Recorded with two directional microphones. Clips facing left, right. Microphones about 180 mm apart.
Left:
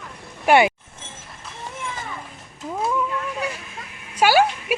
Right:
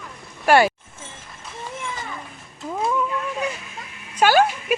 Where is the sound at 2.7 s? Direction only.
Centre (ahead or behind).